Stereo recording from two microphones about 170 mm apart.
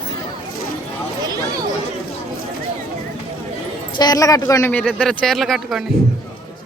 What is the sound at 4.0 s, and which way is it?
Speech, 20° left (ahead or behind).